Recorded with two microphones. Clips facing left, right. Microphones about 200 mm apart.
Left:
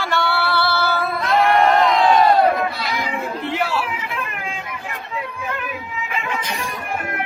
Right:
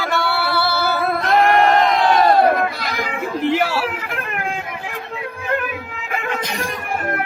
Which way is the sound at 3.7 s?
45° right (ahead or behind).